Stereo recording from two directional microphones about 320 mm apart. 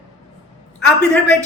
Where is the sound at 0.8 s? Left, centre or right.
Centre.